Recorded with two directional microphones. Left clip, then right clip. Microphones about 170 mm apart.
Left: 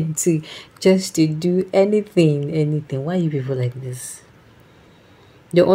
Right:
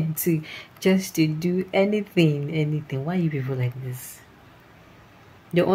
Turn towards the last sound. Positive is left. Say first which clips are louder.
# left 7 dB
turn(degrees=25)  # may be behind; listen again after turning